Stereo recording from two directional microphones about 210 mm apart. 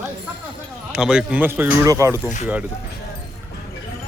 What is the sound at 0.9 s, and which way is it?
Speech, 5° right (ahead or behind).